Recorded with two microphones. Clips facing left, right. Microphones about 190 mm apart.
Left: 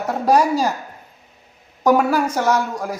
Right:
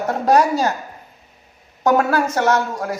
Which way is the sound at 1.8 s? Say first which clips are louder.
Left 1 dB; 10° left (ahead or behind).